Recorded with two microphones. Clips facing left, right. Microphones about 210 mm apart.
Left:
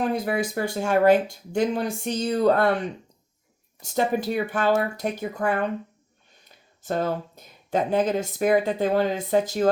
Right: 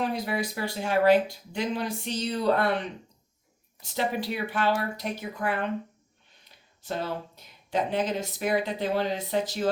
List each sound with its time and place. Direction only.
0.0 s speech: 50° left (ahead or behind)
3.8 s speech: 45° left (ahead or behind)
6.8 s speech: 45° left (ahead or behind)